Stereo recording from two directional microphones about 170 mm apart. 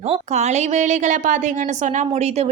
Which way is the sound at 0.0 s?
40° right (ahead or behind).